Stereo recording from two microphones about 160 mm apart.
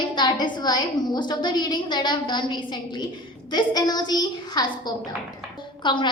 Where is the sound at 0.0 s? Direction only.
25° left (ahead or behind).